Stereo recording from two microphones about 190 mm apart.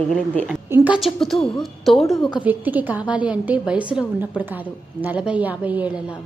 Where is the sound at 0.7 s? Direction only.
5° right (ahead or behind).